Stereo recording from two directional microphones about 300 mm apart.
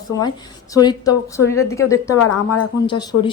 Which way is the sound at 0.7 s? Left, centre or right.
Centre.